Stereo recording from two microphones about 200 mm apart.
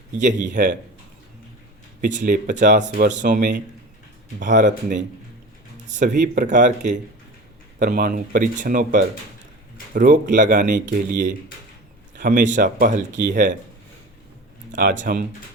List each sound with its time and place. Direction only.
0.2 s speech: 40° right (ahead or behind)
2.0 s speech: 40° right (ahead or behind)
2.8 s speech: 65° right (ahead or behind)
3.2 s speech: 40° right (ahead or behind)
6.0 s speech: 40° right (ahead or behind)
14.7 s speech: 50° right (ahead or behind)